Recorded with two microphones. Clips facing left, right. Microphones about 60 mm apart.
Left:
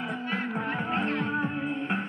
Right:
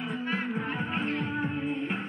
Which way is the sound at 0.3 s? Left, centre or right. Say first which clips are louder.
Left 1 dB; left.